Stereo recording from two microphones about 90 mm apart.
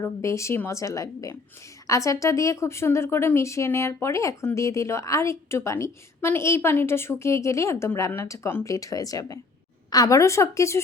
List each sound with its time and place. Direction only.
0.0 s speech: 35° left (ahead or behind)